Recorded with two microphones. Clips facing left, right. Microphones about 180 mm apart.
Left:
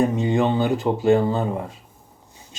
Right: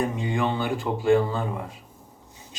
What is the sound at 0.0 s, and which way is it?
Speech, 25° left (ahead or behind).